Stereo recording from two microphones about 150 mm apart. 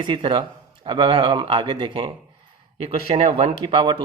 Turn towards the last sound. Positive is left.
turn(degrees=-35)  # may be behind; listen again after turning